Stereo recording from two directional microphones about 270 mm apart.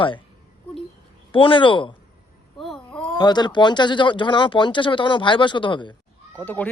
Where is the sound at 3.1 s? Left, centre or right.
Centre.